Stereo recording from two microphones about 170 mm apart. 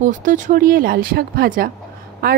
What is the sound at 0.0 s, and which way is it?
A woman's voice, 50° right (ahead or behind).